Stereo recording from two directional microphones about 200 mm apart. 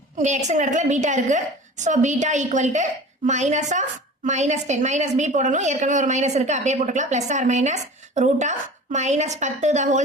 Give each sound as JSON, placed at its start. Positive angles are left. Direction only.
{"t": 0.2, "sound": "a woman's voice", "side_deg": -35}